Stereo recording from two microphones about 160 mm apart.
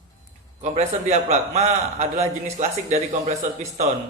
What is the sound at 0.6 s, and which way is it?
A man's voice, 45° right (ahead or behind).